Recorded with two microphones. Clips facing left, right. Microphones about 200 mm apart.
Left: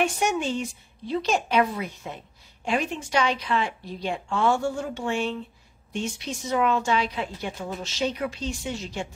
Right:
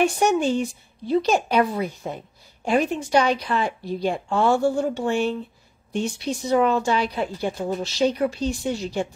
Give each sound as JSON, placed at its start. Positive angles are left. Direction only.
{"t": 0.0, "sound": "a woman's voice", "side_deg": -35}